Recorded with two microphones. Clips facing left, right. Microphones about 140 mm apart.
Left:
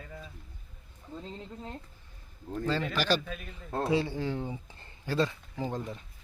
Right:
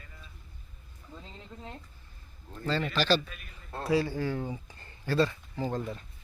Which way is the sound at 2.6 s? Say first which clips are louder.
Right 1 dB; 15° left (ahead or behind).